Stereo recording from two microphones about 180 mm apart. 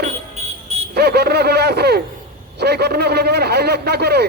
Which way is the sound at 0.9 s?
65° right (ahead or behind).